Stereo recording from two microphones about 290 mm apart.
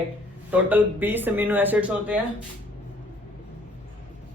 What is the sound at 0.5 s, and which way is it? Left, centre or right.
A man's voice, centre.